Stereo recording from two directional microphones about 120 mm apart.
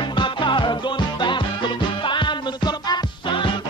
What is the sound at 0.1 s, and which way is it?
Music, 40° left (ahead or behind).